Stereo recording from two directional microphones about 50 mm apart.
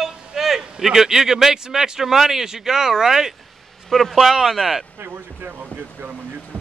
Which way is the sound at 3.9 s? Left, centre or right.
Centre.